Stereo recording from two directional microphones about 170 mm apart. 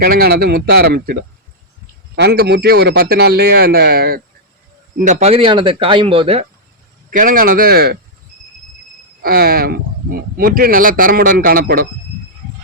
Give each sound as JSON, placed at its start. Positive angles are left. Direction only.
{"t": 0.0, "sound": "a man's voice", "side_deg": -65}
{"t": 4.9, "sound": "speech", "side_deg": -45}
{"t": 7.1, "sound": "speech", "side_deg": -55}
{"t": 9.2, "sound": "speech", "side_deg": -65}